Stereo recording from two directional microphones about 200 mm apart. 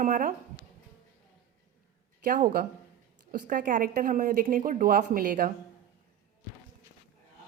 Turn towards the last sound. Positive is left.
turn(degrees=-45)  # may be behind; listen again after turning